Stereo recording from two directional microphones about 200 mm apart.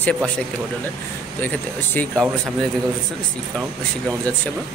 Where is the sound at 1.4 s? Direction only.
10° left (ahead or behind).